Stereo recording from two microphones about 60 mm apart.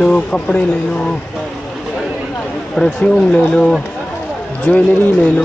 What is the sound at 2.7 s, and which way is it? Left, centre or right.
Speech, centre.